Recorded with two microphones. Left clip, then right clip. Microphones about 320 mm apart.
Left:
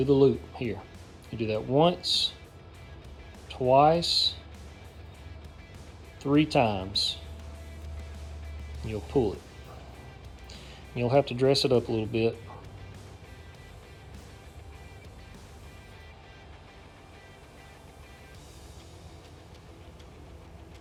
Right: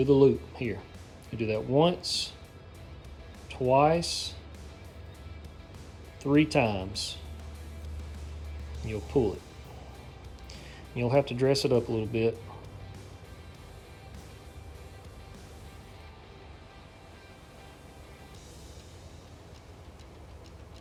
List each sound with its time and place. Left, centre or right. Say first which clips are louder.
0.0 s speech: even; centre
3.5 s speech: left 3 dB; centre
6.2 s speech: left 1 dB; centre
8.9 s speech: even; centre
10.5 s speech: left 1 dB; centre